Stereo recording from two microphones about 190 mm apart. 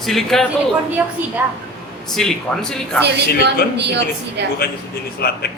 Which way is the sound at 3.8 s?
65° right (ahead or behind).